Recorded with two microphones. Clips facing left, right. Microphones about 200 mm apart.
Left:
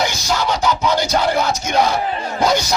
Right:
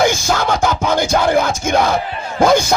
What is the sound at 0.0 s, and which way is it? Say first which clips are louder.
Music: right 5 dB; 50° right (ahead or behind).